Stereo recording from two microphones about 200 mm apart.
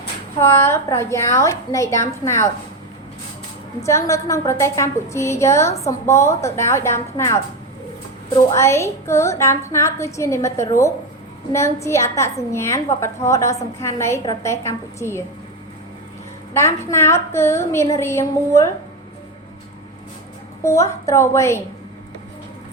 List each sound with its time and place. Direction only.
0.3 s a woman's voice: 10° left (ahead or behind)
3.8 s a woman's voice: 15° left (ahead or behind)
8.5 s a woman's voice: 15° left (ahead or behind)
16.6 s a woman's voice: 15° left (ahead or behind)
20.6 s a woman's voice: 15° left (ahead or behind)